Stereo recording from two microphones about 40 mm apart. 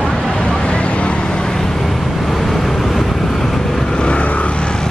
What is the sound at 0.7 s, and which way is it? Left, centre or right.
Vehicle, left.